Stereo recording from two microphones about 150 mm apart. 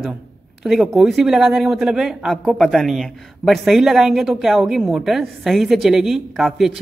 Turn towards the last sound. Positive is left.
turn(degrees=0)  # may be behind; listen again after turning